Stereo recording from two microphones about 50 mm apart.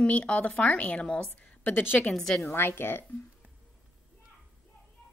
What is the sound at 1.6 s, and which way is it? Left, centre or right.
Speech, left.